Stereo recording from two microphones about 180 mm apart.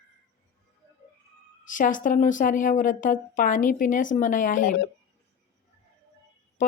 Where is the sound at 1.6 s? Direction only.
45° left (ahead or behind).